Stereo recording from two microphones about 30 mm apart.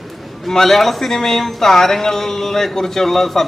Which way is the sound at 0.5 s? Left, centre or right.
Centre.